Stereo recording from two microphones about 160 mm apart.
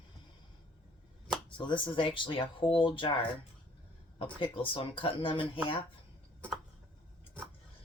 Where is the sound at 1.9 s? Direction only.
30° left (ahead or behind).